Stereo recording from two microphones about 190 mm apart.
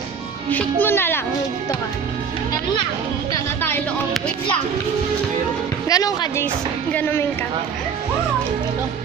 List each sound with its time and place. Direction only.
0.5 s a child's voice: 10° left (ahead or behind)
5.9 s a child's voice: 20° left (ahead or behind)